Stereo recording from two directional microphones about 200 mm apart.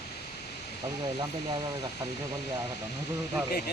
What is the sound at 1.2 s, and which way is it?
Speech, 20° right (ahead or behind).